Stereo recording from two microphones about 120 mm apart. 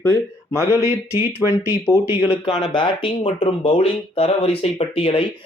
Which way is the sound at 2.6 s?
40° left (ahead or behind).